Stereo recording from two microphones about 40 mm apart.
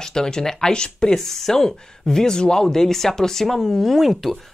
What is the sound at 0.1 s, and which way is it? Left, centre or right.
Speech, centre.